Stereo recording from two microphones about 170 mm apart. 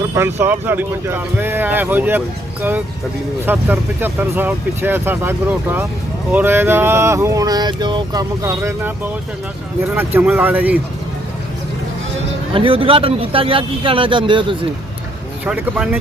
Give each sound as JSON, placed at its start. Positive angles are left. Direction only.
{"t": 0.1, "sound": "speech", "side_deg": -15}
{"t": 9.9, "sound": "speech", "side_deg": -10}
{"t": 12.5, "sound": "speech", "side_deg": -30}
{"t": 15.4, "sound": "speech", "side_deg": -5}